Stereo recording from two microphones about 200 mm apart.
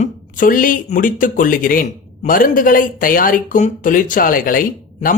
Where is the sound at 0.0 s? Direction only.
45° left (ahead or behind).